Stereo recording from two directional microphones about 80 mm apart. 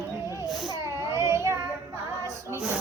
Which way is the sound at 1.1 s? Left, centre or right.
Right.